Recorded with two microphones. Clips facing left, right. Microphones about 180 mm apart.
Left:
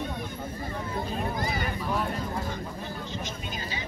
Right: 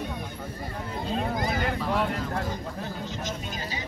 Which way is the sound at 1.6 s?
90° right.